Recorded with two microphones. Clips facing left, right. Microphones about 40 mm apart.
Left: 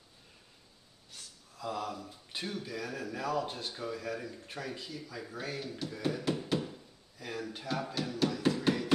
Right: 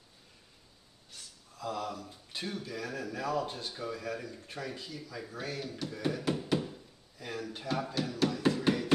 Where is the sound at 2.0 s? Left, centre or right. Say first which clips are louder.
Even; centre.